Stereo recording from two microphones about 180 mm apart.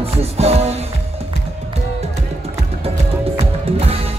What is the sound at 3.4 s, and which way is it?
Music, 35° right (ahead or behind).